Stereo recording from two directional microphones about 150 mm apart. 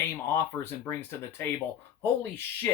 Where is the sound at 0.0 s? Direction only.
15° left (ahead or behind).